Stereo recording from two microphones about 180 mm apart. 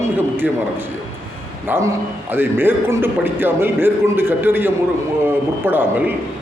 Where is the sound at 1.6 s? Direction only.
15° right (ahead or behind).